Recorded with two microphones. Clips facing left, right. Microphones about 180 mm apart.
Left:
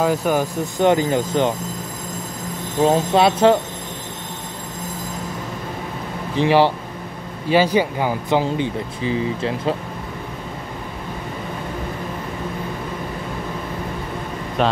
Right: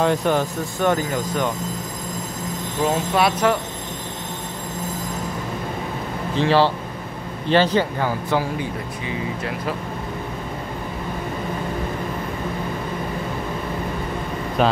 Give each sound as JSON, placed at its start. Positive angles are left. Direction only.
{"t": 0.0, "sound": "speech", "side_deg": 5}
{"t": 0.7, "sound": "speech", "side_deg": 20}
{"t": 2.8, "sound": "speech", "side_deg": 25}
{"t": 6.3, "sound": "speech", "side_deg": 15}
{"t": 14.6, "sound": "speech", "side_deg": 0}